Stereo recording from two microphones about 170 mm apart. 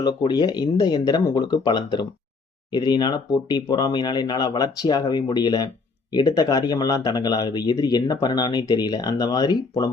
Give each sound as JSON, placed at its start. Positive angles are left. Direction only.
{"t": 0.0, "sound": "speech", "side_deg": 25}